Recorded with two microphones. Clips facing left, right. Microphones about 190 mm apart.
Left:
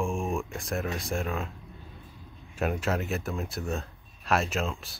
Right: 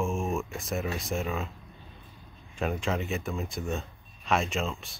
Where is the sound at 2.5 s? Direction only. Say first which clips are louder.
Left 1 dB; 5° left (ahead or behind).